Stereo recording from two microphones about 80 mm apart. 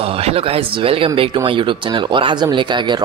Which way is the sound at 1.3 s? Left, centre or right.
Right.